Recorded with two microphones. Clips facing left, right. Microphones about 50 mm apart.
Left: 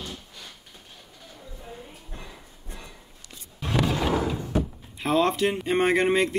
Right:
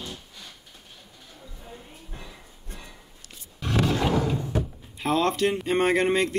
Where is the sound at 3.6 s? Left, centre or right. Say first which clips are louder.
Right 1 dB; centre.